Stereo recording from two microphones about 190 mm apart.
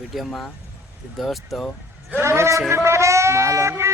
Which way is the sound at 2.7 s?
15° right (ahead or behind).